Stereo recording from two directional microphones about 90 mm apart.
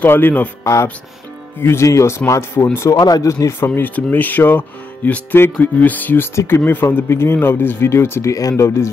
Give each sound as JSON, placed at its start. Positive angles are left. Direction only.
{"t": 0.0, "sound": "speech", "side_deg": 20}
{"t": 1.6, "sound": "speech", "side_deg": 30}
{"t": 3.0, "sound": "speech", "side_deg": 45}